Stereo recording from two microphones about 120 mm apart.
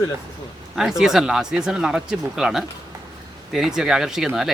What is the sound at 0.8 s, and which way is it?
Speech, 5° right (ahead or behind).